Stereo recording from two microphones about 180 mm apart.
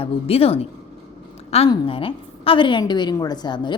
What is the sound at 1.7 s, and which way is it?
A woman's voice, 30° left (ahead or behind).